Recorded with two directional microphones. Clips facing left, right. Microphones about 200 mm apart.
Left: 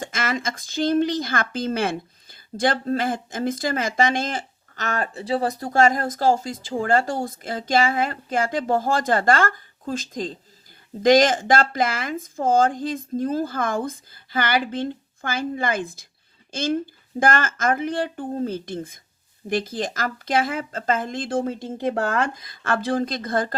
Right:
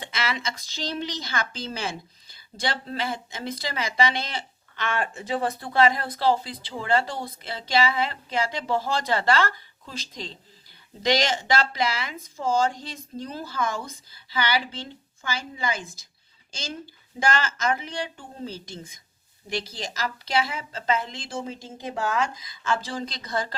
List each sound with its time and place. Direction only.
0.0 s speech: 45° left (ahead or behind)